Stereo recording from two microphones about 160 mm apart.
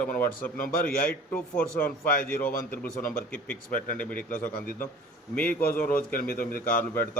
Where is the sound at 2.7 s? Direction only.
60° left (ahead or behind).